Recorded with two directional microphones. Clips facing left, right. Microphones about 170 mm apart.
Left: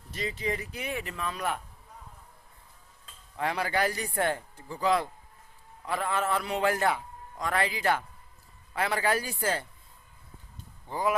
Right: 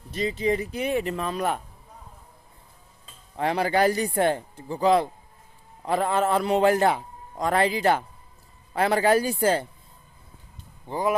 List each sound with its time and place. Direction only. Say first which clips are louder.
0.1 s a man's voice: right 8 dB; 25° right (ahead or behind)
3.3 s a man's voice: right 6 dB; 30° right (ahead or behind)
10.8 s speech: right 3 dB; 25° right (ahead or behind)